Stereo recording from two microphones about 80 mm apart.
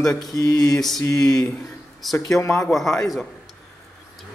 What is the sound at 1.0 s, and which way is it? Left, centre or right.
Speech, left.